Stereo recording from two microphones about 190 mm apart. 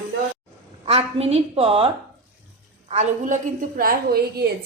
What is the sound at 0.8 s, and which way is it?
A woman's voice, 30° right (ahead or behind).